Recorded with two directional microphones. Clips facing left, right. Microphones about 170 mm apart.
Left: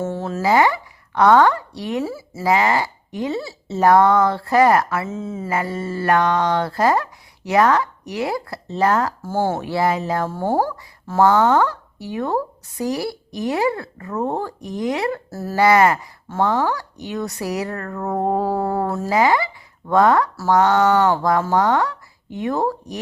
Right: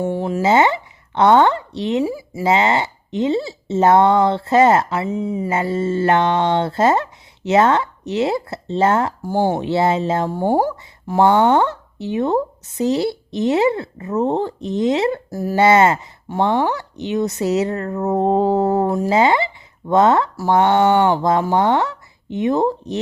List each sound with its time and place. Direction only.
0.0 s speech: 15° right (ahead or behind)